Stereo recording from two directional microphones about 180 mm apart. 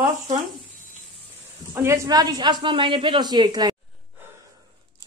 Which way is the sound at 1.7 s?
15° right (ahead or behind).